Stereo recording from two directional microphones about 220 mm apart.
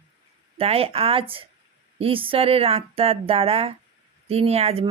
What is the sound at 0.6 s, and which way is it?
Speech, 25° right (ahead or behind).